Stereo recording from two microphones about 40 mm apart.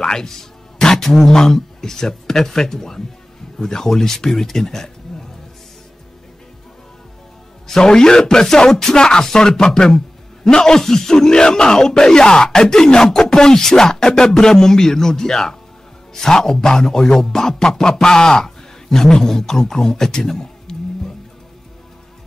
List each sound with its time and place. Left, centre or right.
0.0 s speech: centre
7.6 s speech: centre